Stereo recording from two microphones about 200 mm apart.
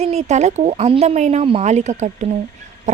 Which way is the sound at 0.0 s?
35° right (ahead or behind).